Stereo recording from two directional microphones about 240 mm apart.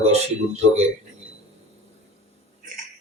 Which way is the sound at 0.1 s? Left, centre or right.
Right.